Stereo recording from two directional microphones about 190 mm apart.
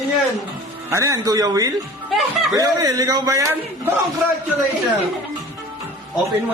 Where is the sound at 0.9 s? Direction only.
15° right (ahead or behind).